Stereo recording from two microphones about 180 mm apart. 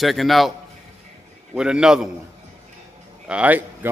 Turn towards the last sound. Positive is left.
turn(degrees=-10)  # may be behind; listen again after turning